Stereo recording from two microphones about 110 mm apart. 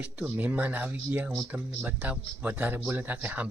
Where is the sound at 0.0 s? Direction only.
15° right (ahead or behind).